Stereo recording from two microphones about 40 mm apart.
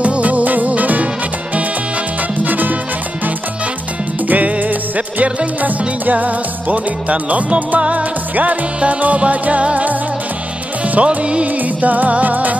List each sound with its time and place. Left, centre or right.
0.0 s music: right
2.4 s music: right
4.3 s music: right
11.0 s music: right
11.8 s music: right